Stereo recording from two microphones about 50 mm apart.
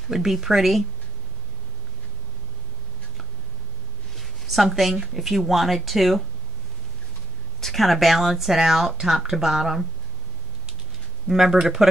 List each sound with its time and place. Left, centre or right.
0.1 s speech: centre
4.2 s a sound: centre
5.0 s speech: centre
7.6 s speech: centre
11.2 s speech: centre